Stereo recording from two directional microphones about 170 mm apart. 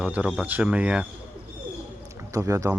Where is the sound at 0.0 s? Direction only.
5° right (ahead or behind).